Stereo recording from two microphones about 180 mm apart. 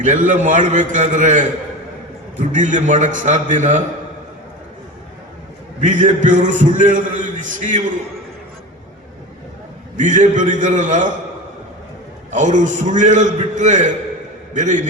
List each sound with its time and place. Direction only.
0.0 s a man's voice: 45° right (ahead or behind)
5.8 s a man's voice: 45° right (ahead or behind)
10.0 s a man's voice: 45° right (ahead or behind)
12.3 s a man's voice: 45° right (ahead or behind)